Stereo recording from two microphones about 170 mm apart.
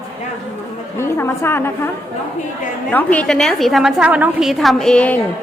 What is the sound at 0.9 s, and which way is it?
Speech, 15° left (ahead or behind).